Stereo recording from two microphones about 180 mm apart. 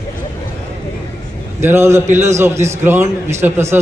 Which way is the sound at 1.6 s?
15° right (ahead or behind).